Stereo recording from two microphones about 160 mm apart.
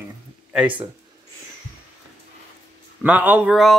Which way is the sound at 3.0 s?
10° right (ahead or behind).